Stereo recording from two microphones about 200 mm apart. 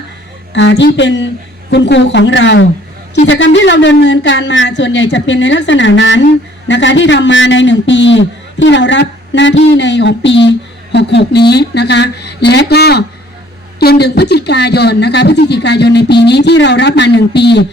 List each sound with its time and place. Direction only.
0.5 s speech: 60° left (ahead or behind)